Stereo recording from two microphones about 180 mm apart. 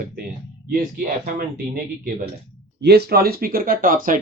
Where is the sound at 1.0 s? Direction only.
55° right (ahead or behind).